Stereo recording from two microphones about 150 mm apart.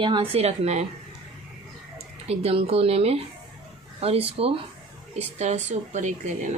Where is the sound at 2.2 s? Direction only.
45° right (ahead or behind).